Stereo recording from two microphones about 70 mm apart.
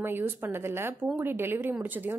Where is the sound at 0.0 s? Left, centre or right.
Right.